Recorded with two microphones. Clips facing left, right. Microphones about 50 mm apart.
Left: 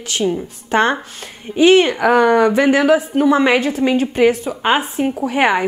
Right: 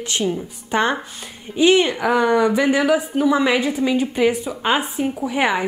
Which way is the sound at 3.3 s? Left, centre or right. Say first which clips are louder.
Left 4 dB; left.